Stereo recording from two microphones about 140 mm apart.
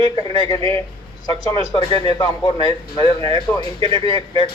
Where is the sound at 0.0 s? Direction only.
30° left (ahead or behind).